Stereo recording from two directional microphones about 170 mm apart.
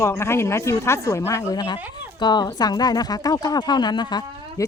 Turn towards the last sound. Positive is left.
turn(degrees=25)  # may be behind; listen again after turning